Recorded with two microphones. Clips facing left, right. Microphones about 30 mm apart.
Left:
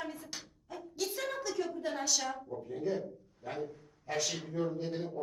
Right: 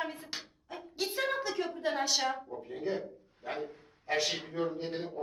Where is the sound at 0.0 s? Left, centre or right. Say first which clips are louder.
Right 4 dB; right.